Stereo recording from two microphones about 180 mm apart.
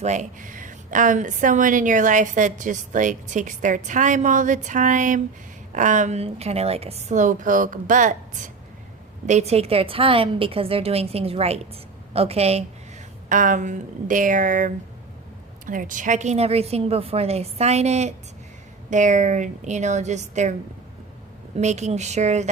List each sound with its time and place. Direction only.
0.0 s a woman's voice: 40° right (ahead or behind)
13.2 s a woman's voice: 45° right (ahead or behind)